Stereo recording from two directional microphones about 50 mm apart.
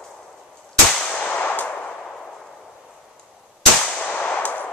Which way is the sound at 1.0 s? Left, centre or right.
Left.